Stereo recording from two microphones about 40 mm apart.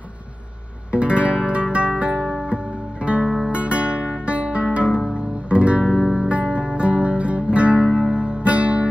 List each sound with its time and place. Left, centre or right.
0.9 s guitar: right
2.5 s music: right
3.5 s guitar: right
4.8 s guitar: centre
5.5 s guitar: right
6.2 s music: right